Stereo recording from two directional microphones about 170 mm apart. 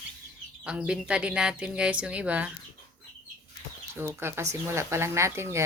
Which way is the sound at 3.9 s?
15° right (ahead or behind).